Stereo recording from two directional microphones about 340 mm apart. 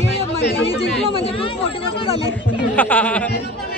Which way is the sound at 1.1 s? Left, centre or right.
Centre.